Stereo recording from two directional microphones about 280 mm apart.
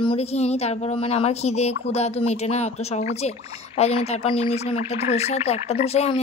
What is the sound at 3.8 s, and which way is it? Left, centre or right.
A woman's voice, left.